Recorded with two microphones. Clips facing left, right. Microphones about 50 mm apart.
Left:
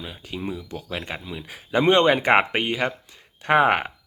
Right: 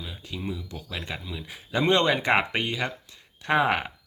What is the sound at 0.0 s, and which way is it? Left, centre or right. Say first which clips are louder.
Speech: left 3 dB; left.